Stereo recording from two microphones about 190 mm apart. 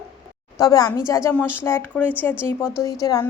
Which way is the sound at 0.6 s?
20° left (ahead or behind).